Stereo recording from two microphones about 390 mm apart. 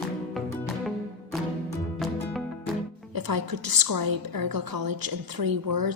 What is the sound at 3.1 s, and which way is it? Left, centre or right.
A woman's voice, right.